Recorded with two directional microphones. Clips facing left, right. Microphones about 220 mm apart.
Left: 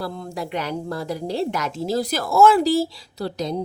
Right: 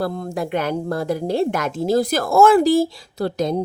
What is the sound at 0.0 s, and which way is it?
A woman's voice, 50° right (ahead or behind).